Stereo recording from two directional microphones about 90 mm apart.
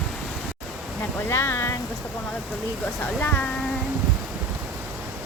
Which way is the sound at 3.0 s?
20° left (ahead or behind).